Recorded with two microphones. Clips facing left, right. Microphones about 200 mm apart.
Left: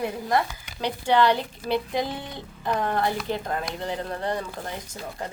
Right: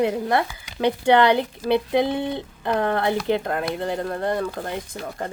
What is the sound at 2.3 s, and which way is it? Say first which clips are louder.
Speech: right 4 dB; 60° right (ahead or behind).